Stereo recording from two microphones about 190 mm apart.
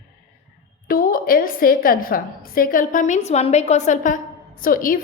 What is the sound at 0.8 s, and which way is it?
A woman's voice, 50° left (ahead or behind).